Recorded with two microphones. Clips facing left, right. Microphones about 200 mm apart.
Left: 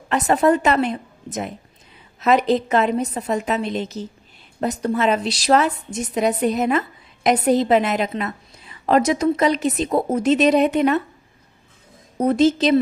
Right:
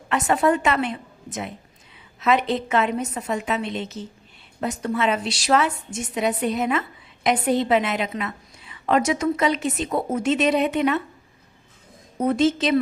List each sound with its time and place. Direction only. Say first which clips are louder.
0.1 s a woman's voice: left 3 dB; 40° left (ahead or behind)
12.1 s a woman's voice: left 3 dB; 35° left (ahead or behind)